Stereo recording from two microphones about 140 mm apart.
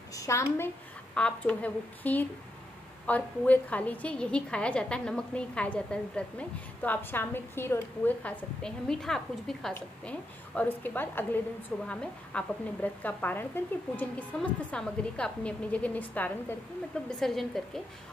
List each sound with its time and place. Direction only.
0.1 s a woman's voice: 20° left (ahead or behind)
1.1 s a woman's voice: 5° left (ahead or behind)
17.2 s a woman's voice: centre (ahead or behind)